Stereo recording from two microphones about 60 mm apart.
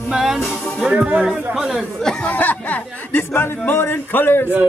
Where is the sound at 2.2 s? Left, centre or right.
Left.